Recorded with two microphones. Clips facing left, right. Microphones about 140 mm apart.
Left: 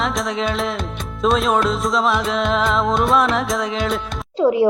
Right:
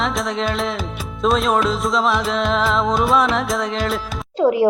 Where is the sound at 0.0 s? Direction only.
Centre (ahead or behind).